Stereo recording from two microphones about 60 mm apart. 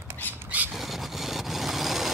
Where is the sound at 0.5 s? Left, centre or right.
Right.